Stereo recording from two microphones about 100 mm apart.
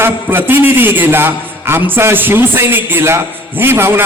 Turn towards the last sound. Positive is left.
turn(degrees=-20)  # may be behind; listen again after turning